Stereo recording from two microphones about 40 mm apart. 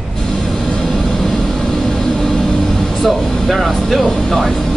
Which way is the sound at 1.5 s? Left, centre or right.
Centre.